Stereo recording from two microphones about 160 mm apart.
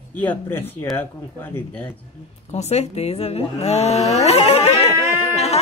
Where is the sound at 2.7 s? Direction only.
40° left (ahead or behind).